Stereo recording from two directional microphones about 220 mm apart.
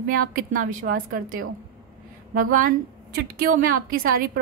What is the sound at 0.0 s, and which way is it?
A woman's voice, 40° right (ahead or behind).